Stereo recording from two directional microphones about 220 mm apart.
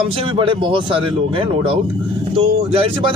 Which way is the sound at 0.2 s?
25° right (ahead or behind).